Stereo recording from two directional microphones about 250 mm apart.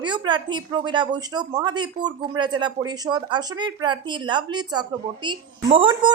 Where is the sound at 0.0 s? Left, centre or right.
Centre.